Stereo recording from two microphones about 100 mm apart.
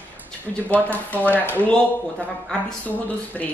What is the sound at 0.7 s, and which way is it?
Speech, 15° left (ahead or behind).